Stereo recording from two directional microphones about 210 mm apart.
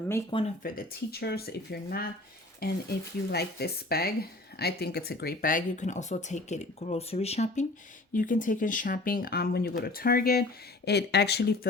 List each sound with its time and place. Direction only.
0.3 s speech: 25° left (ahead or behind)
0.6 s speech: 45° left (ahead or behind)